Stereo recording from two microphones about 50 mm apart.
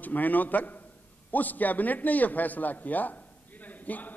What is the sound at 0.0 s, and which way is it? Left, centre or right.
A man's voice, left.